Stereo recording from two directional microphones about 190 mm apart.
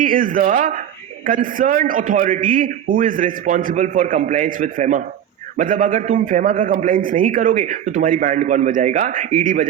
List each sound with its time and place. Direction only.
0.0 s a man's voice: 45° right (ahead or behind)